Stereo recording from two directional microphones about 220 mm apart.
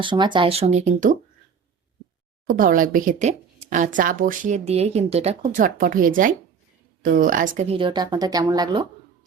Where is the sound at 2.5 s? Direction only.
40° right (ahead or behind); by 8.9 s 20° right (ahead or behind).